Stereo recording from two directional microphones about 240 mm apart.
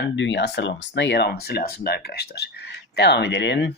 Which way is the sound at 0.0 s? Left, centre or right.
Left.